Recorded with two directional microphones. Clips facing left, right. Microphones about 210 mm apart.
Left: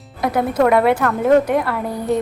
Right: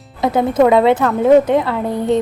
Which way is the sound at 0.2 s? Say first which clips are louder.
Right 4 dB; 25° right (ahead or behind).